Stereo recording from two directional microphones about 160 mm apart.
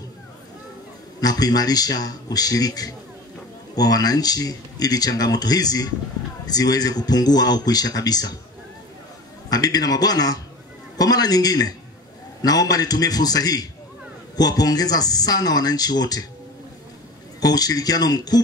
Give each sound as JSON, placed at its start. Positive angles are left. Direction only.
{"t": 1.2, "sound": "speech", "side_deg": 25}
{"t": 9.5, "sound": "speech", "side_deg": 25}
{"t": 17.4, "sound": "speech", "side_deg": 25}